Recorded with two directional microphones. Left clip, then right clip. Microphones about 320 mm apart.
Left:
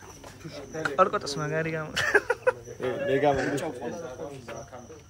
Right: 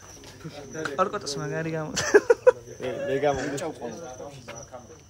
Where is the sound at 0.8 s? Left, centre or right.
Centre.